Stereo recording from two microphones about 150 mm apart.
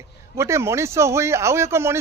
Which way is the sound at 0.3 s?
20° right (ahead or behind).